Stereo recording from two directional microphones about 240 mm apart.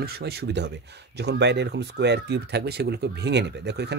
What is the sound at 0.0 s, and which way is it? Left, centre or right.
Speech, right.